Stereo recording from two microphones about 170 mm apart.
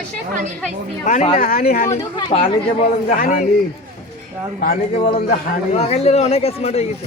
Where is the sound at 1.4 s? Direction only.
60° left (ahead or behind).